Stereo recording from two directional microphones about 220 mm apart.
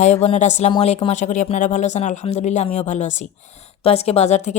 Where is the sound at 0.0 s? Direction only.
30° left (ahead or behind).